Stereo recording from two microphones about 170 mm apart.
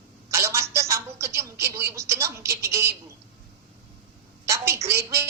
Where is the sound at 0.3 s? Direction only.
15° right (ahead or behind).